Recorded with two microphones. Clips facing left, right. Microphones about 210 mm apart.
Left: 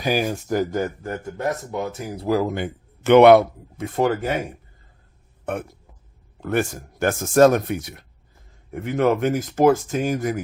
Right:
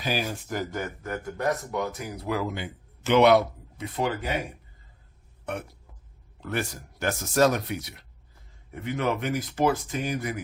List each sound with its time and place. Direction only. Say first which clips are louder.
0.0 s speech: left 7 dB; 45° left (ahead or behind)
5.5 s speech: left 6 dB; 50° left (ahead or behind)